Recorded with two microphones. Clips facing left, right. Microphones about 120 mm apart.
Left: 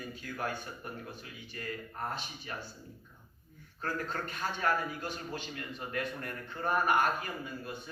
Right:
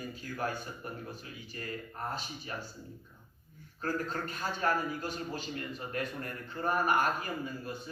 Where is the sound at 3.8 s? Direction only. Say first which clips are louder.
Right 2 dB; 40° right (ahead or behind).